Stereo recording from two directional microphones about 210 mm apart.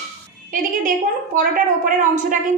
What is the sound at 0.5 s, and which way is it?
A woman's voice, 40° right (ahead or behind).